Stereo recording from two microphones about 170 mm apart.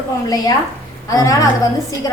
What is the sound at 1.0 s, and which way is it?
Speech, 20° left (ahead or behind).